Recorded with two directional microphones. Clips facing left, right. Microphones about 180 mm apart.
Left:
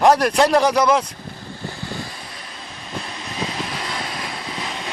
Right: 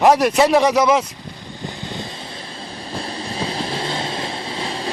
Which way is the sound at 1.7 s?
20° right (ahead or behind).